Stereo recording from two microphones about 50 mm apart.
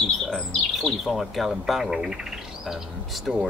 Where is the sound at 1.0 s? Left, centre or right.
Centre.